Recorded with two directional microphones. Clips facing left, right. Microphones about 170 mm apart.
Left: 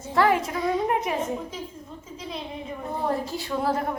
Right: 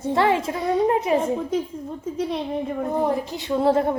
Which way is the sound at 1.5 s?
60° right (ahead or behind).